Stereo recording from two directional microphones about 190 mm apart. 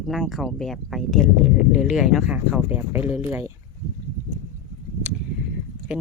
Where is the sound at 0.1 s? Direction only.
Centre (ahead or behind).